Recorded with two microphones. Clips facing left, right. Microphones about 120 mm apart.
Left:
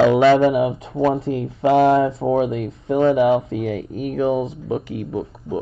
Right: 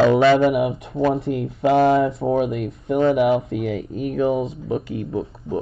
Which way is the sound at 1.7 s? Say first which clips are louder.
Left 2 dB; 90° left.